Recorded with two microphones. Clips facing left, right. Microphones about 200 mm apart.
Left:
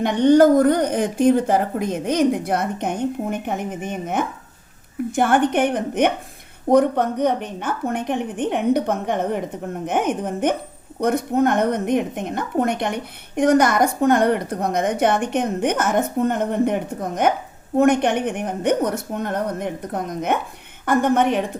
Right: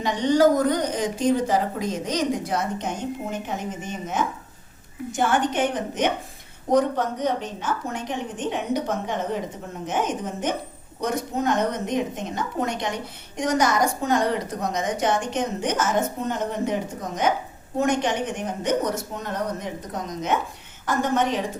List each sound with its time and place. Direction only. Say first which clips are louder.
0.0 s a woman's voice: left 5 dB; 60° left (ahead or behind)